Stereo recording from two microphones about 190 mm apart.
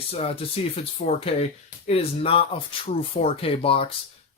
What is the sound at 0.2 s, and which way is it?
Speech, 30° left (ahead or behind).